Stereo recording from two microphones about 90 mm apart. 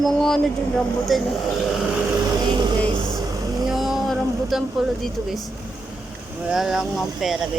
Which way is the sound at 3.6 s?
5° right (ahead or behind).